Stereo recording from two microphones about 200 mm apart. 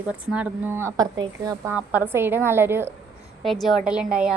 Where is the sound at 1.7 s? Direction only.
5° right (ahead or behind).